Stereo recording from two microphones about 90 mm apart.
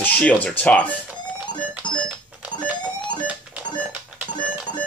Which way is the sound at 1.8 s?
60° left (ahead or behind).